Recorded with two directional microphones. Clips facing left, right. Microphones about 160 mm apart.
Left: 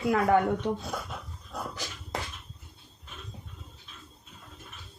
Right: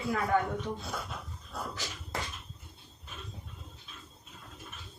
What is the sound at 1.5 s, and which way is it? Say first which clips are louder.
Dog: left 2 dB; 15° left (ahead or behind).